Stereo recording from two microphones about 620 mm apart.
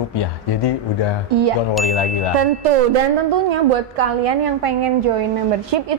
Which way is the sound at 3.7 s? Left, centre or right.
Right.